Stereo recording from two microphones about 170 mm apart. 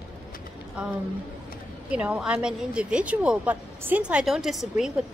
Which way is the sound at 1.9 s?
5° right (ahead or behind).